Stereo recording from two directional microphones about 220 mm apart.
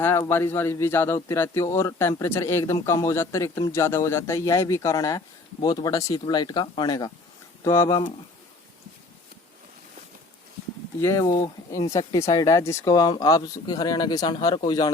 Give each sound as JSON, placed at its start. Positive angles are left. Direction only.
{"t": 0.0, "sound": "speech", "side_deg": 10}
{"t": 11.0, "sound": "speech", "side_deg": 15}